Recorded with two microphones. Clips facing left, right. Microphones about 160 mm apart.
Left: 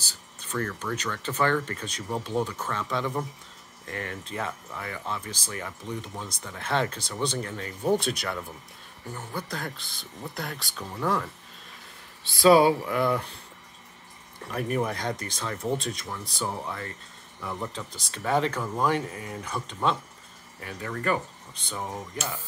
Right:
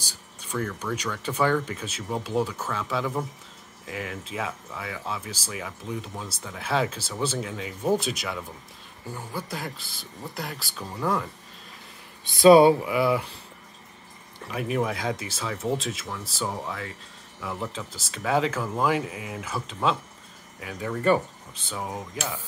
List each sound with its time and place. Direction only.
0.0 s speech: 10° right (ahead or behind)
12.3 s speech: 20° right (ahead or behind)
12.8 s speech: 5° right (ahead or behind)
14.5 s speech: centre (ahead or behind)